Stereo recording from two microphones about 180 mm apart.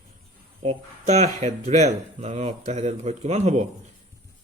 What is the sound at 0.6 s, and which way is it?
Speech, 40° right (ahead or behind).